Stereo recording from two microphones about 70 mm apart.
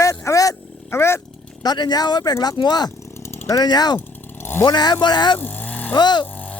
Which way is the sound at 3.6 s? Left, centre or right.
Left.